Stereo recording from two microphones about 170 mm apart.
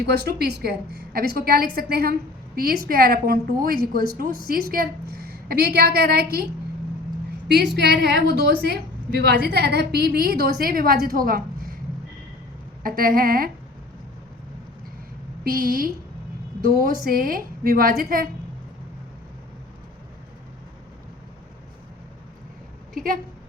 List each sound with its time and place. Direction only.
0.0 s a woman's voice: 75° right (ahead or behind)
7.4 s a woman's voice: 80° right; by 11.4 s 60° right (ahead or behind)
12.8 s a woman's voice: 60° right (ahead or behind)
15.4 s a woman's voice: 60° right (ahead or behind)